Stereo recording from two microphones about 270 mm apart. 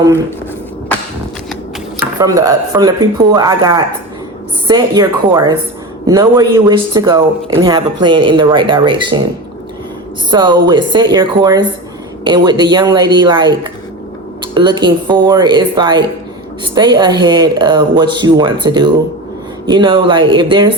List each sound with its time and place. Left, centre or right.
2.1 s speech: centre
10.3 s speech: centre